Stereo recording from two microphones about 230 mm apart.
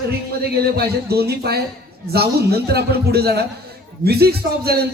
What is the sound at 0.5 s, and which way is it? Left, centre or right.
A man's voice, right.